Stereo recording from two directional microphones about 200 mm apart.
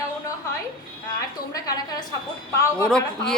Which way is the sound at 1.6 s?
20° left (ahead or behind).